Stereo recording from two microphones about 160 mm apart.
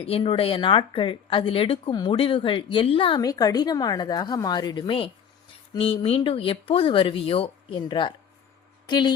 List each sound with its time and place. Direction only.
0.0 s speech: 35° left (ahead or behind)
3.2 s a woman's voice: 25° left (ahead or behind)